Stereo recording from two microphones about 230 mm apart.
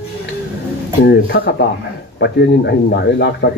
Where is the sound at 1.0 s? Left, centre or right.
Left.